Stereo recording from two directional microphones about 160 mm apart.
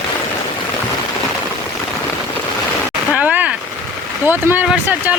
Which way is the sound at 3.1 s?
5° right (ahead or behind).